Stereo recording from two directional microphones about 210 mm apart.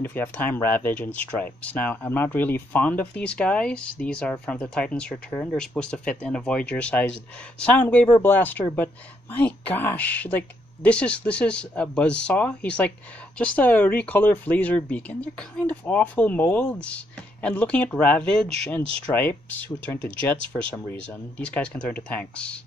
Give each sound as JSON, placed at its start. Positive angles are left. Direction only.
{"t": 0.0, "sound": "speech", "side_deg": 10}
{"t": 18.8, "sound": "speech", "side_deg": -25}
{"t": 19.1, "sound": "speech", "side_deg": 10}